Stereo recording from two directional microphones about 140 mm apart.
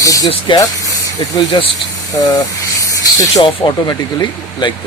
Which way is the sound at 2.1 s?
25° left (ahead or behind).